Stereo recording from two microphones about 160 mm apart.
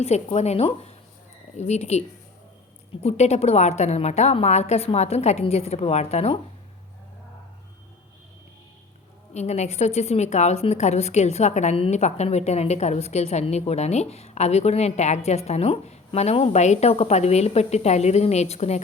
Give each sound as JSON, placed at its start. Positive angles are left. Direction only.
{"t": 0.0, "sound": "a woman's voice", "side_deg": 45}
{"t": 9.3, "sound": "a woman's voice", "side_deg": 45}